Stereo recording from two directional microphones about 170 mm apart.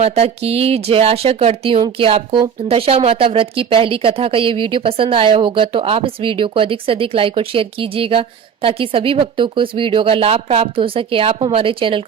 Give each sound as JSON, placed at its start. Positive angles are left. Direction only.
{"t": 0.0, "sound": "speech", "side_deg": -35}